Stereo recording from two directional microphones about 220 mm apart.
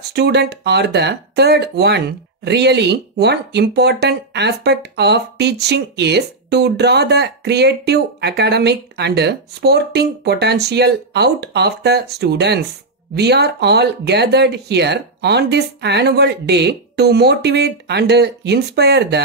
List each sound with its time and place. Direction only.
0.1 s speech: 50° right (ahead or behind)